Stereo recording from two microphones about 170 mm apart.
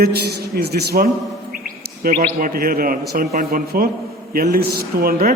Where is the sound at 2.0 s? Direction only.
55° right (ahead or behind).